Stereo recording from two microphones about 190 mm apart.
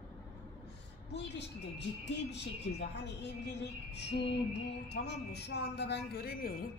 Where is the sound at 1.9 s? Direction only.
65° left (ahead or behind).